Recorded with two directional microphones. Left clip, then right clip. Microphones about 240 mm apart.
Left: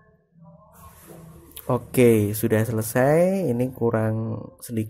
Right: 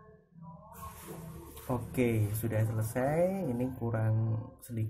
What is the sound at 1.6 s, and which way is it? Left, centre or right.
Speech, left.